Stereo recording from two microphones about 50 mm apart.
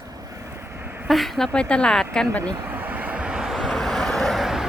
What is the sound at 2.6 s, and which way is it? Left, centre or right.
Vehicle, right.